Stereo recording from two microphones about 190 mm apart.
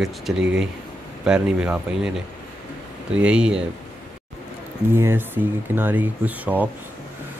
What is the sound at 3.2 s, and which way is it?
Speech, 5° right (ahead or behind).